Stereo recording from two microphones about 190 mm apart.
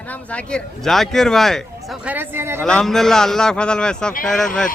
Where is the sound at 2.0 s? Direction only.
10° right (ahead or behind).